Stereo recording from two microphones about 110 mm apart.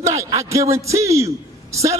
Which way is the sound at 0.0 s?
30° right (ahead or behind).